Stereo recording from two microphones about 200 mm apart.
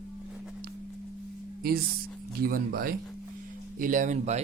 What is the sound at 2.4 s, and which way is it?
Speech, 45° right (ahead or behind).